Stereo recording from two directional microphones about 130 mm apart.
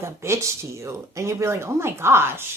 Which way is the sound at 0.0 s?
20° right (ahead or behind).